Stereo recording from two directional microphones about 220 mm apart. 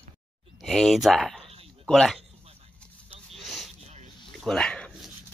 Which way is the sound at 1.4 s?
25° right (ahead or behind).